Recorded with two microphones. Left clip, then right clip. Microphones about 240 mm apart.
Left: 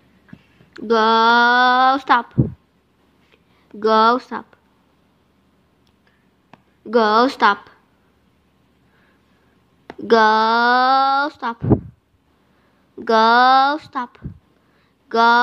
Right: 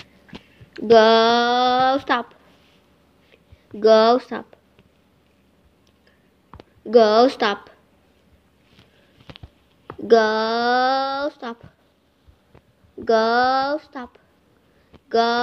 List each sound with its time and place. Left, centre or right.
0.7 s speech: centre
3.8 s a woman's voice: centre
6.9 s a woman's voice: centre
9.8 s speech: left
13.0 s speech: left